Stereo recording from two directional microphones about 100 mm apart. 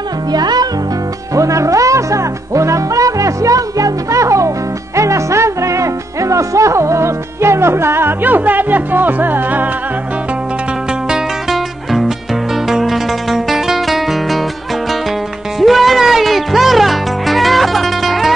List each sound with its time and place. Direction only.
0.3 s speech: 40° right (ahead or behind)
1.3 s music: 35° right (ahead or behind)
11.1 s music: centre (ahead or behind)
15.6 s music: centre (ahead or behind)